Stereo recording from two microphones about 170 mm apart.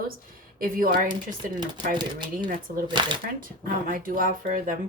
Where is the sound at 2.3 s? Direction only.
55° right (ahead or behind).